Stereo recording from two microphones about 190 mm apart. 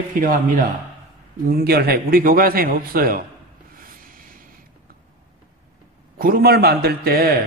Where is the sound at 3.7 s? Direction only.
50° right (ahead or behind).